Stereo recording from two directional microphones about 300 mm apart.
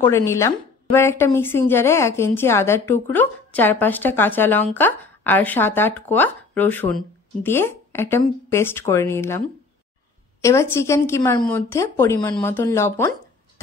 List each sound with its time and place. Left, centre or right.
0.0 s speech: centre
10.4 s speech: centre